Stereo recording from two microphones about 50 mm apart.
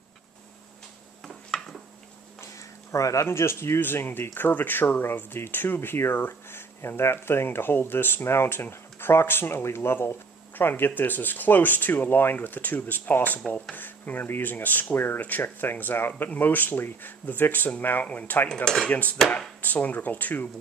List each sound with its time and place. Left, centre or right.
1.2 s a sound: centre
2.9 s speech: left
3.3 s speech: left
3.8 s speech: left
10.5 s speech: left
18.5 s cutlery: centre
18.9 s speech: left